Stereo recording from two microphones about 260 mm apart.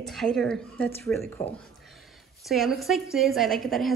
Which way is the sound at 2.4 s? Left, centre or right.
Centre.